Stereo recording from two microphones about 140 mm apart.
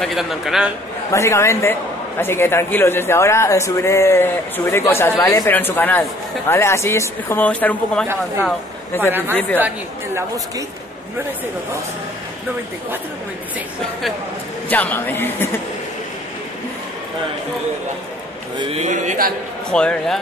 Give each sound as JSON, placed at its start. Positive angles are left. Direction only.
{"t": 0.0, "sound": "a man's voice", "side_deg": 0}
{"t": 1.1, "sound": "a man's voice", "side_deg": 20}
{"t": 14.7, "sound": "a man's voice", "side_deg": 10}
{"t": 18.6, "sound": "speech", "side_deg": -45}
{"t": 18.9, "sound": "a man's voice", "side_deg": -75}
{"t": 19.7, "sound": "a man's voice", "side_deg": 5}